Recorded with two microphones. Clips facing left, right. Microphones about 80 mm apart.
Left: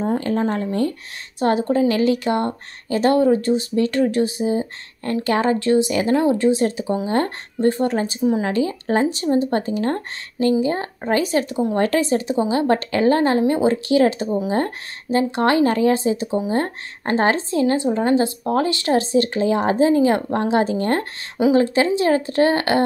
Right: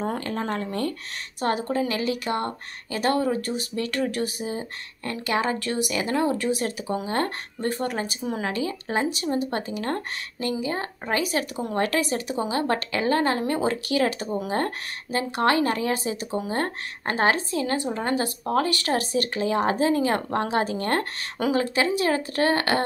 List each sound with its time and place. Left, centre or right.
0.2 s speech: left